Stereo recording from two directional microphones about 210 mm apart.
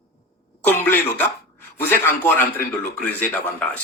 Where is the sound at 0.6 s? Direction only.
10° left (ahead or behind).